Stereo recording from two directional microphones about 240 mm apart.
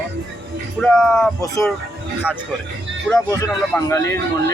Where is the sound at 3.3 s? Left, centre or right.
Centre.